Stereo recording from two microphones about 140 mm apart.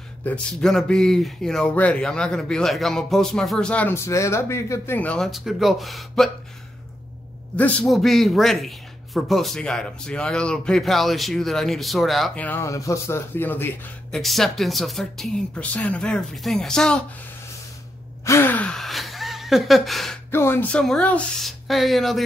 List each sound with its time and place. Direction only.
0.2 s speech: 5° left (ahead or behind)
7.5 s speech: 10° left (ahead or behind)
12.4 s speech: 15° left (ahead or behind)
14.1 s speech: centre (ahead or behind)
18.2 s speech: 20° left (ahead or behind); by 20.2 s centre (ahead or behind)
20.2 s speech: 15° left (ahead or behind)
20.8 s speech: 5° left (ahead or behind)